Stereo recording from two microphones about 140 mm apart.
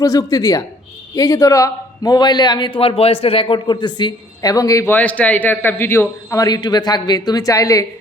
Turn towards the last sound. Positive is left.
turn(degrees=25)  # may be behind; listen again after turning